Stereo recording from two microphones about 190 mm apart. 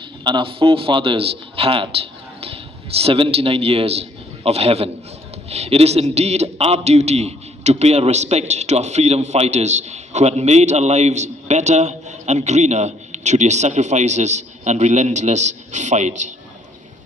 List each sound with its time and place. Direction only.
0.3 s a man's voice: 25° right (ahead or behind)